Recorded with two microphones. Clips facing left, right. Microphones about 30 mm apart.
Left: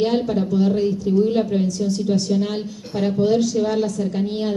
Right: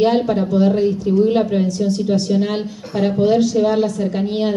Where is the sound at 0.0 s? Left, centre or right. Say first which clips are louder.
Right 4 dB; right.